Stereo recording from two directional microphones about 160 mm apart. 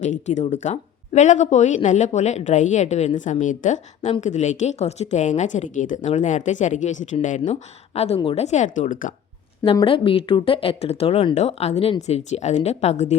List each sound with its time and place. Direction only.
0.0 s a woman's voice: 45° left (ahead or behind)
9.8 s a woman's voice: 35° left (ahead or behind)